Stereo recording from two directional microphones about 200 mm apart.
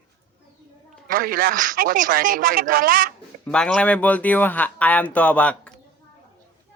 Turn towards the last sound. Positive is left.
turn(degrees=5)  # may be behind; listen again after turning